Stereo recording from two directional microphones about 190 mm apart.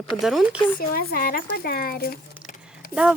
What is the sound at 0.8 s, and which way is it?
Speech, 50° left (ahead or behind).